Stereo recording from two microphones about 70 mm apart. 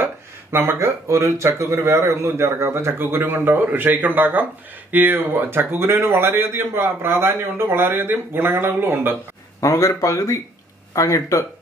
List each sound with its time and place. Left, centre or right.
0.0 s a man's voice: right
9.6 s speech: left